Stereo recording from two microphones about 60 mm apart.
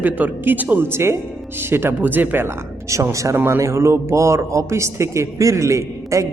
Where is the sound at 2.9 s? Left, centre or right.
Right.